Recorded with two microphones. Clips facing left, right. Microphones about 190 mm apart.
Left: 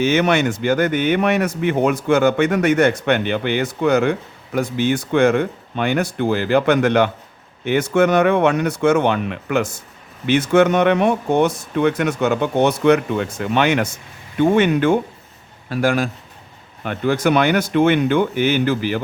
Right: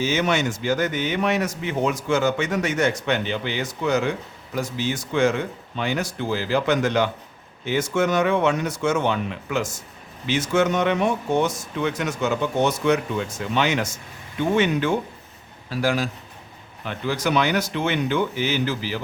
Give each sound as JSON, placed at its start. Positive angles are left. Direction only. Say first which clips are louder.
{"t": 0.0, "sound": "a man's voice", "louder": "left 6 dB", "side_deg": 60}